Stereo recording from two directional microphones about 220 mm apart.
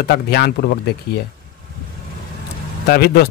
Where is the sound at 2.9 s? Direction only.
45° left (ahead or behind).